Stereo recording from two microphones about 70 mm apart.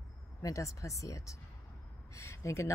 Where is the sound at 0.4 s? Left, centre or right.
Left.